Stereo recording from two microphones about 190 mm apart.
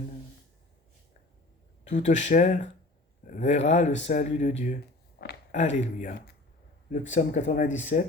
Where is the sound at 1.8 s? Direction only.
40° left (ahead or behind).